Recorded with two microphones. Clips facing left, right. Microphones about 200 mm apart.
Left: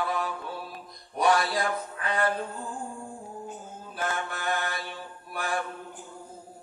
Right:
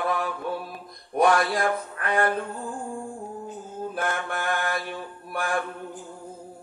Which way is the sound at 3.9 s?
55° right (ahead or behind).